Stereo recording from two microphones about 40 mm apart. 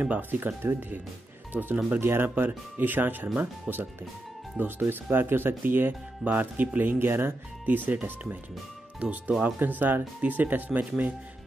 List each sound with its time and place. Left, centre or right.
0.0 s chopping: right
0.4 s speech: right
1.5 s speech: right
2.0 s speech: right
2.2 s chopping: right
3.7 s speech: right
4.6 s speech: right
5.1 s speech: right
5.6 s chopping: right
6.5 s speech: right
6.8 s speech: right
7.6 s chopping: right
9.0 s speech: right
9.6 s chopping: right